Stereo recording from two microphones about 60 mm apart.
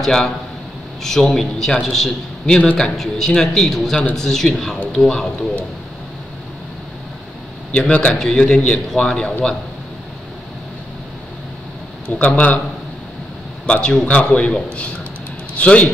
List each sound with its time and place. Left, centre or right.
0.0 s a man's voice: centre
7.7 s a man's voice: centre
12.2 s a man's voice: left
13.7 s a man's voice: centre